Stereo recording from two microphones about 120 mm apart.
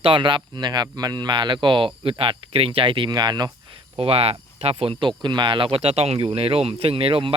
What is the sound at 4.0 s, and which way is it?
Speech, 55° right (ahead or behind).